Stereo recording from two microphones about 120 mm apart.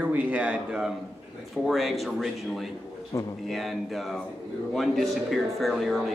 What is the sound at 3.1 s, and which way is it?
Speech, 25° left (ahead or behind).